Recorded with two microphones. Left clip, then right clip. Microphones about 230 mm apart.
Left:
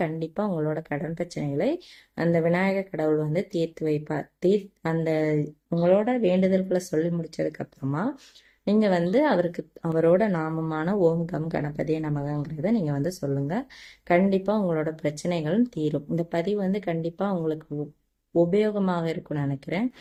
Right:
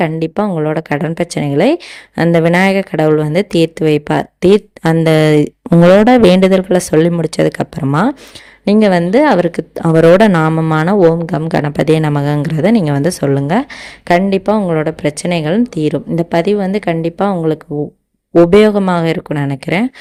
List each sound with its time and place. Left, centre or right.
0.0 s a woman's voice: right
5.8 s a woman's voice: right